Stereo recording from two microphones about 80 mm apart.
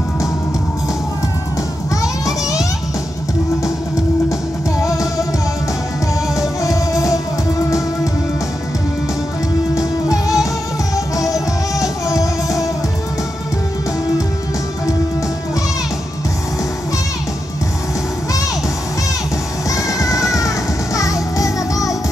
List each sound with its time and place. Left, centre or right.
4.8 s music: left
6.6 s music: left
9.8 s music: left
19.7 s music: left